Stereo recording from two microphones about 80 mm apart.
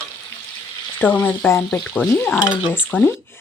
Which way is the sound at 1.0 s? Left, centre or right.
Left.